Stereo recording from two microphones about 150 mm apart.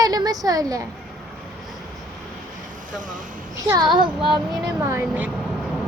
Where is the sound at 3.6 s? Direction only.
25° right (ahead or behind).